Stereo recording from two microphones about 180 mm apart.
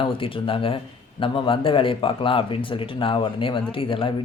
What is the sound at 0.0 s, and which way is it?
Speech, 30° left (ahead or behind).